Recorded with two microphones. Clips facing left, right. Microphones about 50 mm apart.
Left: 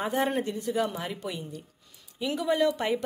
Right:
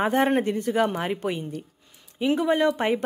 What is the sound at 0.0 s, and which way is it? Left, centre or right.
A woman's voice, right.